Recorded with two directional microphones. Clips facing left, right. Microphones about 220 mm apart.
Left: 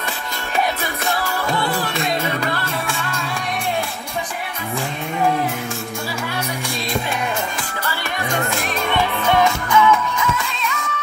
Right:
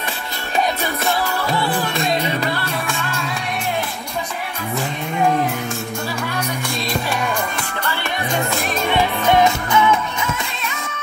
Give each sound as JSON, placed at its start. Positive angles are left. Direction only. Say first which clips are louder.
{"t": 8.9, "sound": "music", "louder": "right 2 dB", "side_deg": -20}